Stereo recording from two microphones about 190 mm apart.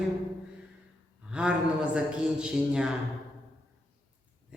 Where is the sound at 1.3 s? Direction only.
5° right (ahead or behind).